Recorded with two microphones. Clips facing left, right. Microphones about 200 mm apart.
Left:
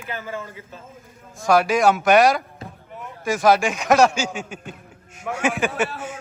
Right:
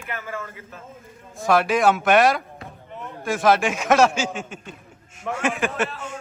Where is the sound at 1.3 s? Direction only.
Centre (ahead or behind).